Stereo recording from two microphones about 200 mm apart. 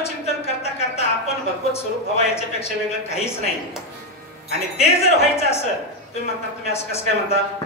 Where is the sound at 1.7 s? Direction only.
30° left (ahead or behind).